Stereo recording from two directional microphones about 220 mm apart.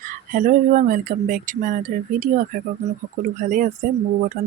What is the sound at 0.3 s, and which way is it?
Speech, 40° right (ahead or behind).